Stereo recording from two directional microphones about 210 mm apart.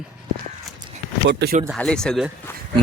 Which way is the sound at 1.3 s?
55° right (ahead or behind).